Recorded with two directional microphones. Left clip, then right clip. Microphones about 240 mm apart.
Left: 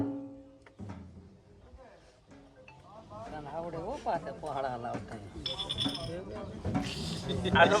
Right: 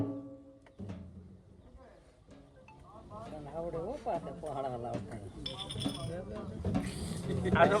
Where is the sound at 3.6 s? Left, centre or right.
Left.